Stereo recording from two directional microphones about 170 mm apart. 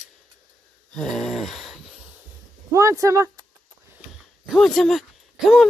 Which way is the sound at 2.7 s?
15° right (ahead or behind).